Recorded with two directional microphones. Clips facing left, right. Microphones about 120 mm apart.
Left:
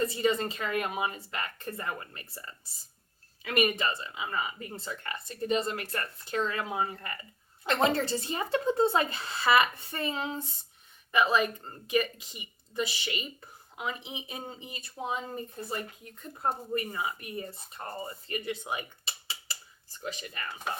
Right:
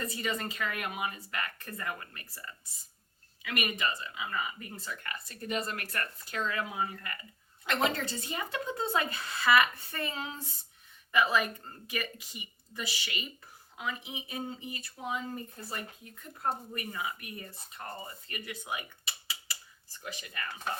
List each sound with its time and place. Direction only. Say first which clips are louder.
0.0 s speech: left 7 dB; 30° left (ahead or behind)